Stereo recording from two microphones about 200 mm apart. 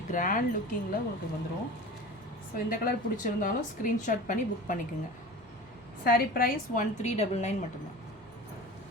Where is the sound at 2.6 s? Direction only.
45° left (ahead or behind).